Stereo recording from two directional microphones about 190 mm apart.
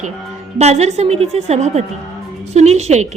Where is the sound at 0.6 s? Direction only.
35° right (ahead or behind).